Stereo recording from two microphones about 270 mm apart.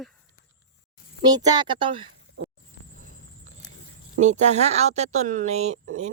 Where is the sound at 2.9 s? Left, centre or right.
Right.